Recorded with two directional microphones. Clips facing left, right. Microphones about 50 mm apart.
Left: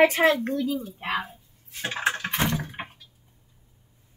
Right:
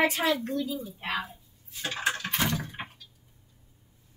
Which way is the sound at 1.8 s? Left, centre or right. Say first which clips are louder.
Left 3 dB; left.